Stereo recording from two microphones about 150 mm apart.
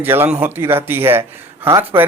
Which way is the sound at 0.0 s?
15° right (ahead or behind).